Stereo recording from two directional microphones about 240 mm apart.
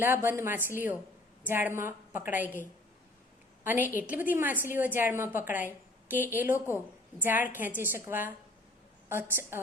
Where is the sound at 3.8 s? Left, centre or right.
Centre.